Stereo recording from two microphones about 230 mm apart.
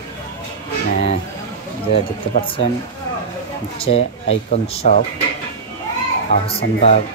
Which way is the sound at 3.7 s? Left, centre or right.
Left.